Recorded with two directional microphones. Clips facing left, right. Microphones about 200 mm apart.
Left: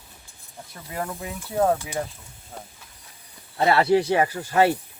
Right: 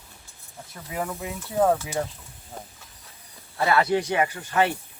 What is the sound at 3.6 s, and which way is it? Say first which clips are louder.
Speech: left 3 dB; 30° left (ahead or behind).